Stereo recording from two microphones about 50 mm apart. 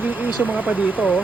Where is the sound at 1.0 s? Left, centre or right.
Right.